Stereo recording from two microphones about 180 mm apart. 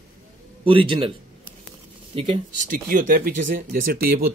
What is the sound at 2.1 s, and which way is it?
Speech, 30° right (ahead or behind).